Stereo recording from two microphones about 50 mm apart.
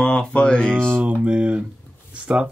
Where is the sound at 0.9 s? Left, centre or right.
Right.